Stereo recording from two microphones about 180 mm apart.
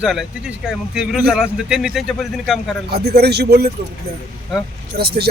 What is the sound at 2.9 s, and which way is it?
Speech, 60° right (ahead or behind).